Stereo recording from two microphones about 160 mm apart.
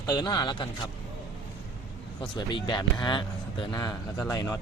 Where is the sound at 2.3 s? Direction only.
30° left (ahead or behind).